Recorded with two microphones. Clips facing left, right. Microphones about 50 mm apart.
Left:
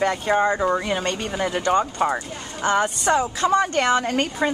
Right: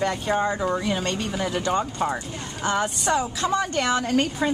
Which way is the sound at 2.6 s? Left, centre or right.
Centre.